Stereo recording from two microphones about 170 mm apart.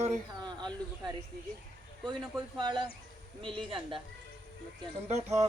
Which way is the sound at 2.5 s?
25° right (ahead or behind).